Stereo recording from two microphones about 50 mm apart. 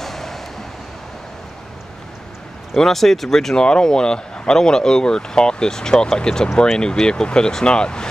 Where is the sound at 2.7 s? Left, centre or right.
Centre.